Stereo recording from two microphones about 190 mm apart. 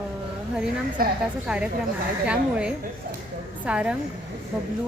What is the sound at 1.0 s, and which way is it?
Speech, 50° right (ahead or behind).